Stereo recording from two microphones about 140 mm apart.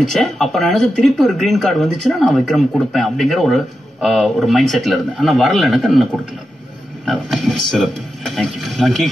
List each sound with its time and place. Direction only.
0.0 s speech: 5° left (ahead or behind)